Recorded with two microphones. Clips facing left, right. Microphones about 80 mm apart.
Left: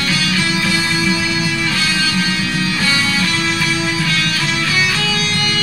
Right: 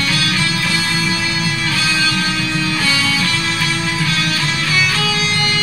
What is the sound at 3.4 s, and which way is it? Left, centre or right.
Music, centre.